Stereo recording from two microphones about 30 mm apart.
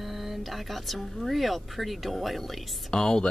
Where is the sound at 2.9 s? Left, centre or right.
Left.